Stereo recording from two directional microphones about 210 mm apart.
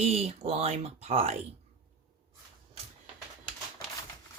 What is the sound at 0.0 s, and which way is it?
Speech, 30° right (ahead or behind).